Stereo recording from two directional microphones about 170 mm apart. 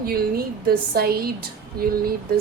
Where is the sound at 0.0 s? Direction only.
60° right (ahead or behind).